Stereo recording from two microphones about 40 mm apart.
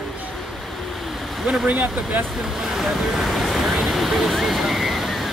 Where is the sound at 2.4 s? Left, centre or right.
Centre.